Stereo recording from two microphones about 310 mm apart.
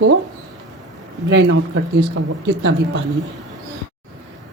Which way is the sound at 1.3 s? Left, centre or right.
Right.